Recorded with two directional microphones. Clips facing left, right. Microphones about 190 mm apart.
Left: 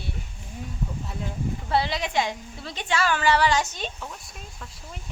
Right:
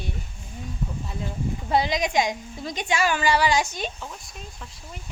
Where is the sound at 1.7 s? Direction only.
15° right (ahead or behind).